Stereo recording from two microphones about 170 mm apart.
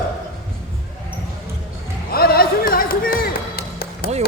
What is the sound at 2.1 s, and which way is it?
Music, 65° left (ahead or behind).